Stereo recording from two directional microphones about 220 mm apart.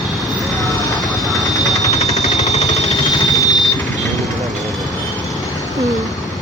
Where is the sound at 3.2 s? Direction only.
15° left (ahead or behind).